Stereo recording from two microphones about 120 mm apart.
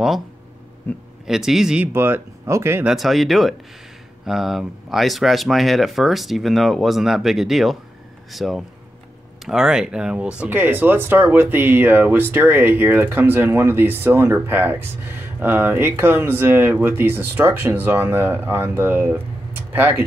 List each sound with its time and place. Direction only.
0.9 s speech: 15° left (ahead or behind)
1.2 s speech: 5° right (ahead or behind)
1.9 s speech: 20° right (ahead or behind)
2.9 s speech: centre (ahead or behind); by 20.1 s 15° right (ahead or behind)